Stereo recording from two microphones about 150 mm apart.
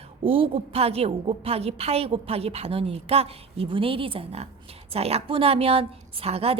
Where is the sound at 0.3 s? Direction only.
40° right (ahead or behind).